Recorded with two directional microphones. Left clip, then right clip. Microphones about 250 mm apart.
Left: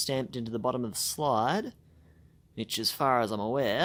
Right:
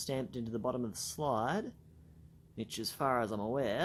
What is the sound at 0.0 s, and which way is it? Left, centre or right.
Speech, left.